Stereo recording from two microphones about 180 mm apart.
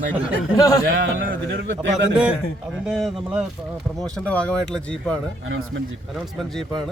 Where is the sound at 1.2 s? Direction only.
70° right (ahead or behind).